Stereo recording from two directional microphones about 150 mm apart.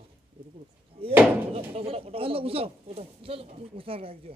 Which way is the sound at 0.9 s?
35° right (ahead or behind).